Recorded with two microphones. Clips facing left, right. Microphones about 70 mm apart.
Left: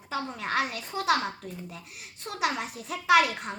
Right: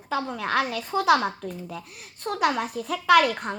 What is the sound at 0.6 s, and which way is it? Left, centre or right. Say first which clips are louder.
Speech: right 4 dB; right.